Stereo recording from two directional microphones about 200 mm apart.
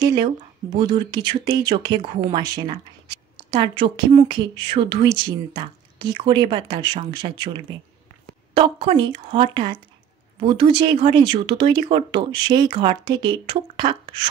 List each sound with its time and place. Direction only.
0.0 s speech: 20° right (ahead or behind)